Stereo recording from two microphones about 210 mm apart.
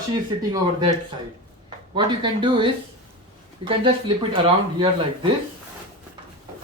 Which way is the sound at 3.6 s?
25° right (ahead or behind).